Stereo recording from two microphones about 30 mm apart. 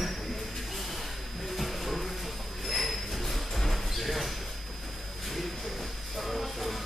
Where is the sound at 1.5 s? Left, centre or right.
Centre.